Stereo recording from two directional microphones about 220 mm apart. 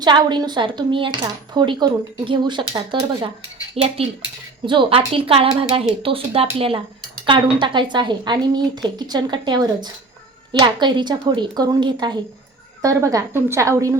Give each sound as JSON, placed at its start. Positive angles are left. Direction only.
{"t": 0.0, "sound": "a woman's voice", "side_deg": -20}